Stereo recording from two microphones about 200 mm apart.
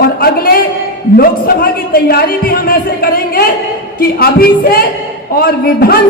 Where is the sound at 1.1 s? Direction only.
50° left (ahead or behind).